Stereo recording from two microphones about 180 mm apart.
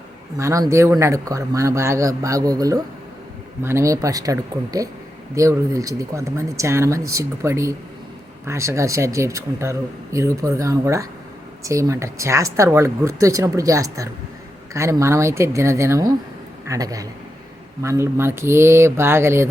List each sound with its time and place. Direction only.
0.3 s a man's voice: 15° right (ahead or behind)